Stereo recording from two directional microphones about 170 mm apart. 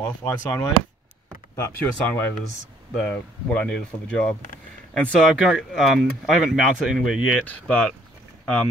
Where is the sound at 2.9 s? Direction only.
5° left (ahead or behind).